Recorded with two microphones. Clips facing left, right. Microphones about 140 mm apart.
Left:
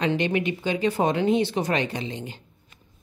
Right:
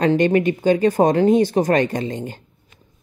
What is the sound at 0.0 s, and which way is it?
Speech, 45° right (ahead or behind).